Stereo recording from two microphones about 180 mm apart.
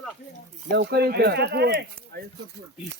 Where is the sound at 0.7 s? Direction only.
65° right (ahead or behind).